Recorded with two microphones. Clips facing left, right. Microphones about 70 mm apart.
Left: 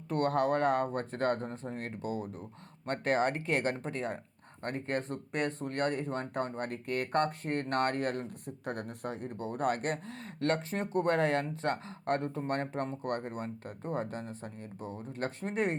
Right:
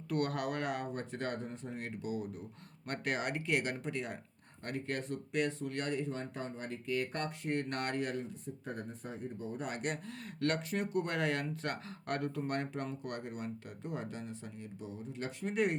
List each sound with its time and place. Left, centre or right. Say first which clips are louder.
0.1 s speech: left 6 dB; left